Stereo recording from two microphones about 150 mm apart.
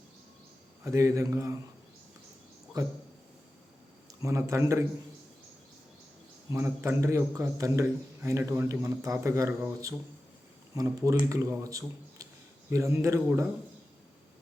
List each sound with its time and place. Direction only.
0.9 s a man's voice: 20° right (ahead or behind)
2.8 s a man's voice: 25° right (ahead or behind)
4.2 s a man's voice: 20° right (ahead or behind)
6.5 s a man's voice: 15° right (ahead or behind)